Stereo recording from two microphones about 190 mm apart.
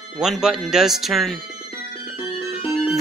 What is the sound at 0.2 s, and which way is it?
Speech, centre (ahead or behind).